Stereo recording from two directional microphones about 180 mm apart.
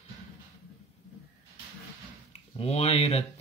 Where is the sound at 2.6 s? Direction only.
35° left (ahead or behind).